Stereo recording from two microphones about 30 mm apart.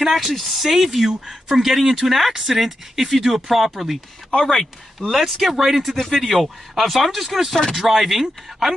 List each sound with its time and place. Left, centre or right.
0.0 s speech: centre
4.4 s speech: centre
5.0 s speech: left
5.4 s speech: centre
5.9 s speech: centre
6.2 s speech: centre
7.5 s speech: centre
7.8 s speech: centre